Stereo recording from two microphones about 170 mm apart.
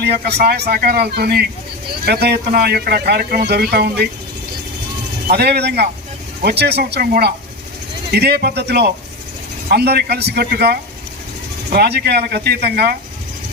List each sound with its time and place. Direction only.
0.0 s speech: 70° right (ahead or behind)
5.3 s speech: 70° right (ahead or behind)